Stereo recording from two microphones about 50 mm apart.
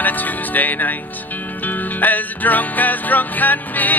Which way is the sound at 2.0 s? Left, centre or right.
Left.